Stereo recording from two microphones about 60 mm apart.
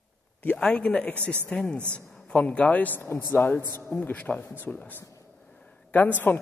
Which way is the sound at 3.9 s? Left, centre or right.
Left.